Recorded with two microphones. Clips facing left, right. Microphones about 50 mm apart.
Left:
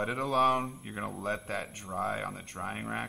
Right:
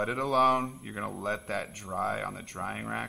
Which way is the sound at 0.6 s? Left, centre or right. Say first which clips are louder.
Right 2 dB; centre.